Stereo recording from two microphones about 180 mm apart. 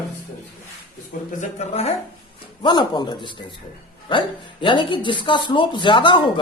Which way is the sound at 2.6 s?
25° left (ahead or behind).